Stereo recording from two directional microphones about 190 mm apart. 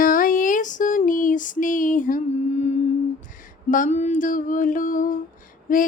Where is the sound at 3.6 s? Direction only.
45° left (ahead or behind).